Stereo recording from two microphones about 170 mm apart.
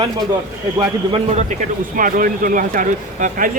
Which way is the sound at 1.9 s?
55° right (ahead or behind).